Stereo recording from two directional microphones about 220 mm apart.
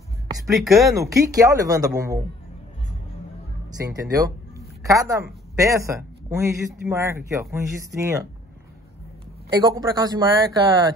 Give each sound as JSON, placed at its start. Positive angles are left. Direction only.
{"t": 0.6, "sound": "speech", "side_deg": 0}
{"t": 1.3, "sound": "speech", "side_deg": -15}
{"t": 3.8, "sound": "speech", "side_deg": -15}
{"t": 9.5, "sound": "speech", "side_deg": -20}